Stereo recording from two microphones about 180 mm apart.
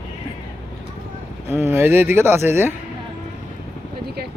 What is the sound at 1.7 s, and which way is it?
Speech, 10° right (ahead or behind).